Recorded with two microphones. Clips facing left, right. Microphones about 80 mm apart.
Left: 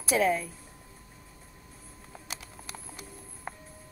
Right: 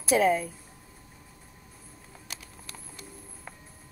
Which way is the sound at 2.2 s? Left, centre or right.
Centre.